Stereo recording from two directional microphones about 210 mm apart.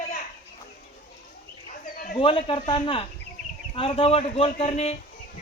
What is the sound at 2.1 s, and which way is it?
A man's voice, 25° left (ahead or behind).